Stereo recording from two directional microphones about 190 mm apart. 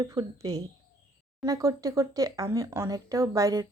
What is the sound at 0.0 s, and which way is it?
Speech, 15° right (ahead or behind).